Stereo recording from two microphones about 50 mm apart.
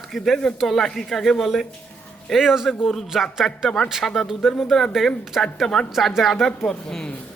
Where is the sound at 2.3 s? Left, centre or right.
Centre.